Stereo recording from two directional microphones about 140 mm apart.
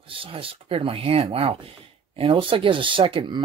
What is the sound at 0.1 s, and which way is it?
Speech, 40° right (ahead or behind).